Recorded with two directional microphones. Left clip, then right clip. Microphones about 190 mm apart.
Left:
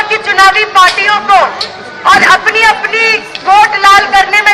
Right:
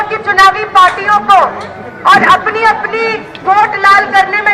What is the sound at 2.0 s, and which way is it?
A man's voice, 15° left (ahead or behind).